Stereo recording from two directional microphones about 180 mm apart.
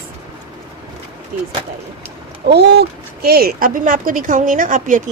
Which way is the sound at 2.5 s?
60° right (ahead or behind).